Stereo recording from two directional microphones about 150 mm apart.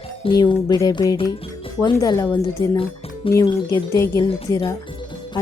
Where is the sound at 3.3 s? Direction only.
25° left (ahead or behind).